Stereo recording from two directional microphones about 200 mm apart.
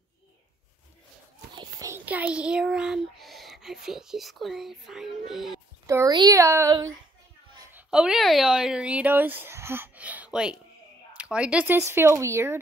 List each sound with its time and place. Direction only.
1.5 s a child's voice: 20° right (ahead or behind); by 5.6 s centre (ahead or behind)
5.9 s speech: 15° right (ahead or behind)
7.7 s speech: 5° right (ahead or behind)